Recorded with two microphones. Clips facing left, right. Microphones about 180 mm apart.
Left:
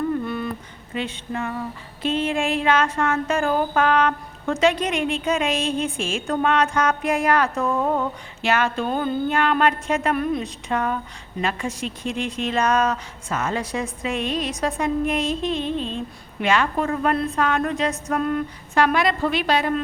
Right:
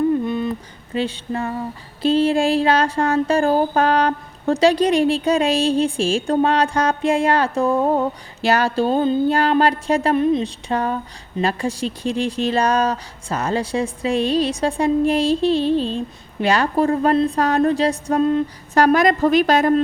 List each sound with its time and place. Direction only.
0.1 s a sound: 20° right (ahead or behind)
0.9 s female singing: 35° right (ahead or behind)
18.7 s a woman's voice: 40° right (ahead or behind)